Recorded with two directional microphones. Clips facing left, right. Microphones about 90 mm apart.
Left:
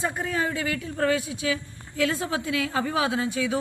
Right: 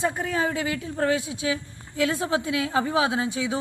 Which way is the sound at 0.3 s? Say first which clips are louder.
Right 1 dB; 20° right (ahead or behind).